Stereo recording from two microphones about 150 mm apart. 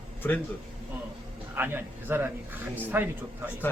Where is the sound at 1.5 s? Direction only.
15° right (ahead or behind).